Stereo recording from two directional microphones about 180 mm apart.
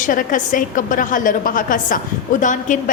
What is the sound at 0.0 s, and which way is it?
A woman's voice, 50° left (ahead or behind).